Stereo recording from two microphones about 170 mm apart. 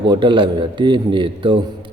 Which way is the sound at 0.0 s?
30° right (ahead or behind).